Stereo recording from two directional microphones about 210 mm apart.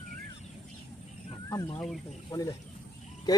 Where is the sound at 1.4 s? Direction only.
15° left (ahead or behind).